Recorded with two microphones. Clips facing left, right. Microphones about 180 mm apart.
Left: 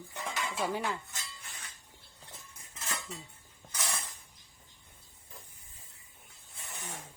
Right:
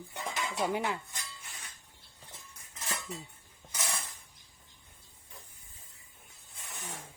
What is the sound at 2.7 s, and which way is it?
Cutlery, 15° right (ahead or behind).